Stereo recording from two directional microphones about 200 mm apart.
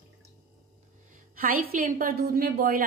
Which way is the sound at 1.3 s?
45° right (ahead or behind).